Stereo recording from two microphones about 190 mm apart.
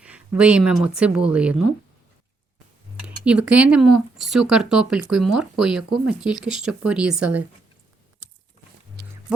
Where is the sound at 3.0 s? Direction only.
5° right (ahead or behind).